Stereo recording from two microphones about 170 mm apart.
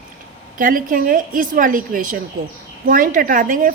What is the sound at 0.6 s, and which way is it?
A woman's voice, 55° right (ahead or behind).